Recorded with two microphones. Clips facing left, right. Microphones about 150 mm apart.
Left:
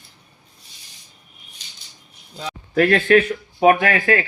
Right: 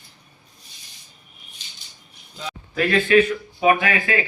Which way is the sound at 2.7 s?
60° left (ahead or behind).